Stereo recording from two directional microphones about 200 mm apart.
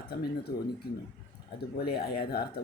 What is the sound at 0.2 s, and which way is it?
Speech, 50° left (ahead or behind).